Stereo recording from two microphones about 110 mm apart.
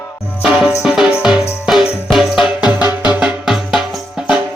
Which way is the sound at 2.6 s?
15° right (ahead or behind).